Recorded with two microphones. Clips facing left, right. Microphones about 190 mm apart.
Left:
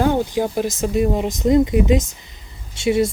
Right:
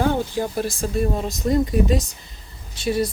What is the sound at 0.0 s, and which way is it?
A woman's voice, 15° left (ahead or behind).